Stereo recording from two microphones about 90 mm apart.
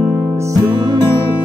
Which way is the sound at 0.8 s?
50° right (ahead or behind).